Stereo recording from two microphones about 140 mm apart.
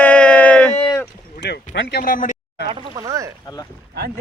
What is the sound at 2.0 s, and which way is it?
Speech, 85° left.